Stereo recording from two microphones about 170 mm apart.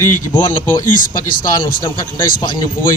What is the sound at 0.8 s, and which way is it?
Speech, 50° left (ahead or behind).